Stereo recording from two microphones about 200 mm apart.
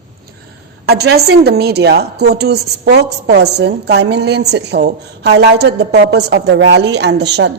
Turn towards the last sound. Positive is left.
turn(degrees=-60)  # may be behind; listen again after turning